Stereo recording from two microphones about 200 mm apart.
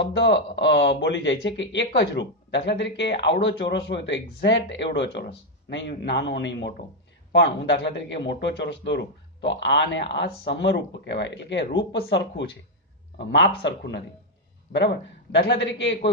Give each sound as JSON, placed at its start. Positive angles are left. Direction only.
{"t": 0.1, "sound": "a man's voice", "side_deg": 60}
{"t": 15.3, "sound": "a man's voice", "side_deg": 60}